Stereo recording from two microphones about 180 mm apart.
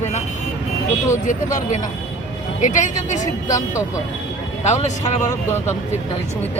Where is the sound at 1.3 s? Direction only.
45° left (ahead or behind).